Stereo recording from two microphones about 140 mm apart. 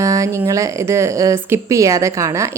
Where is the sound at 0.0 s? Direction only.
20° right (ahead or behind).